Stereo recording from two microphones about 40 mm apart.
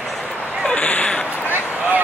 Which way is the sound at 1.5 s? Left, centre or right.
Right.